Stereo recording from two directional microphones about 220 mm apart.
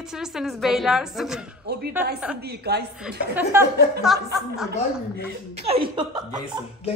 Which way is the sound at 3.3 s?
10° right (ahead or behind).